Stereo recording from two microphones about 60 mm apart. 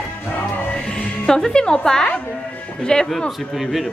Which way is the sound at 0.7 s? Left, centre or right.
Centre.